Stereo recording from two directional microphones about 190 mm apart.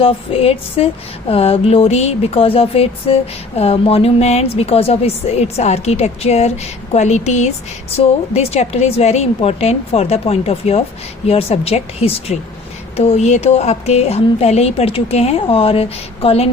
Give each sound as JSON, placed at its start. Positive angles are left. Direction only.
{"t": 0.0, "sound": "speech", "side_deg": 30}